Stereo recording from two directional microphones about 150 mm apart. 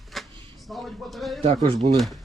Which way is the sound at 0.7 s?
Centre (ahead or behind).